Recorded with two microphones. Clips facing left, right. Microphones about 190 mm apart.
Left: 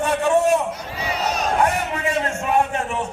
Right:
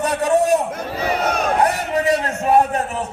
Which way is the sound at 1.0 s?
55° right (ahead or behind).